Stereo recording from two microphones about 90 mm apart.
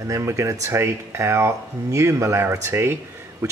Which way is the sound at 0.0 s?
35° right (ahead or behind).